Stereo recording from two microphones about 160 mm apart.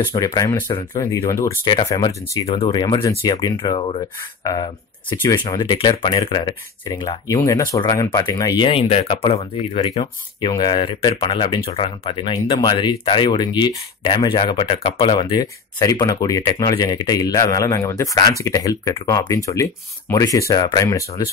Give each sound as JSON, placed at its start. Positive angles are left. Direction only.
{"t": 0.1, "sound": "speech", "side_deg": 25}
{"t": 2.4, "sound": "speech", "side_deg": 35}
{"t": 5.3, "sound": "speech", "side_deg": 25}